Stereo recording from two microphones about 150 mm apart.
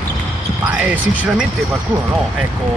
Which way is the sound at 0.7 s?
10° right (ahead or behind).